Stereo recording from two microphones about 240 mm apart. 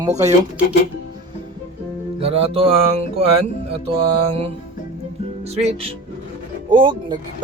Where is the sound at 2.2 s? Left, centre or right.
Right.